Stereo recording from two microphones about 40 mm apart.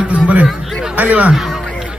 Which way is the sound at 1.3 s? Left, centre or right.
Centre.